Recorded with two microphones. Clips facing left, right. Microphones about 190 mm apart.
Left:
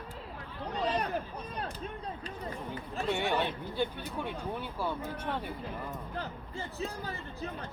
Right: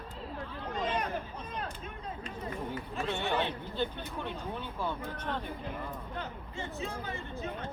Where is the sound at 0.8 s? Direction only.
35° left (ahead or behind).